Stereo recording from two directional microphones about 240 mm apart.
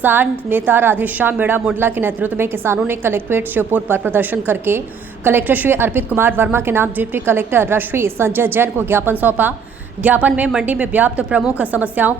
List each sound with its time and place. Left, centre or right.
0.0 s a woman's voice: centre